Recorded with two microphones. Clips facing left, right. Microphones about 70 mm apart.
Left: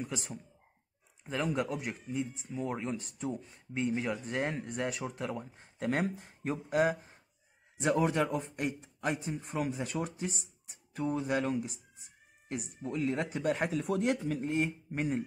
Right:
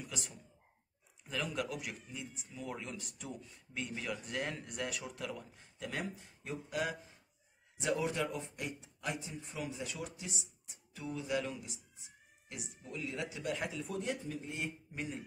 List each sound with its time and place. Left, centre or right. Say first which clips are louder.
0.0 s a man's voice: left 7 dB; left
14.5 s a man's voice: left 10 dB; left